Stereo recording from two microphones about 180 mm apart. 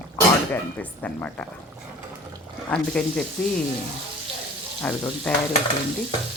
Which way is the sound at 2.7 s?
5° left (ahead or behind).